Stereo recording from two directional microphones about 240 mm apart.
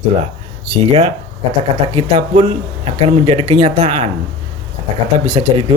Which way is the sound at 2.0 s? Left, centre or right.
Right.